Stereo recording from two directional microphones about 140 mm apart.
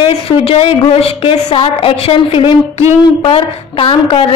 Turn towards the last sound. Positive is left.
turn(degrees=40)  # may be behind; listen again after turning